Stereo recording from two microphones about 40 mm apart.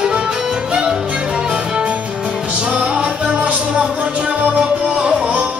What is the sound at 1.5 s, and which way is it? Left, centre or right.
Music, right.